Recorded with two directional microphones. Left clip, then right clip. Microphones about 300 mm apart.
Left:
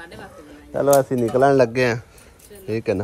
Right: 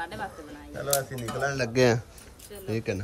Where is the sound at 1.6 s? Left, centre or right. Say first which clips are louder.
Left 5 dB; centre.